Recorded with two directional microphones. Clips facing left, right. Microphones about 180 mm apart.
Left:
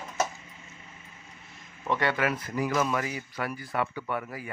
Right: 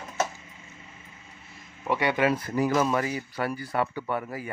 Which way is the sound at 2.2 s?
30° right (ahead or behind).